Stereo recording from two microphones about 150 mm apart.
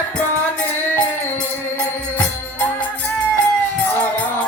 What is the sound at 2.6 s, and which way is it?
Music, 10° left (ahead or behind).